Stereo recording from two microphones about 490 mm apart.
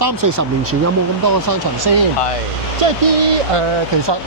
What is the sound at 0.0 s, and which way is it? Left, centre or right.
Speech, right.